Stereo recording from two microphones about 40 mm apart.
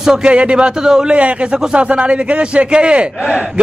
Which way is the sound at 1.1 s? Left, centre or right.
Right.